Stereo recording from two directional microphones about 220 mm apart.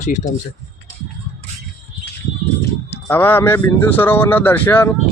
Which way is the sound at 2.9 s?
10° left (ahead or behind).